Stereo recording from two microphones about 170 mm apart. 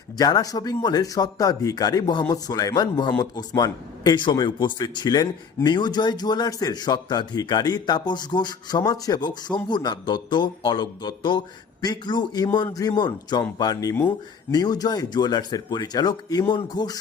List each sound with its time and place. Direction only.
0.2 s a man's voice: 25° left (ahead or behind)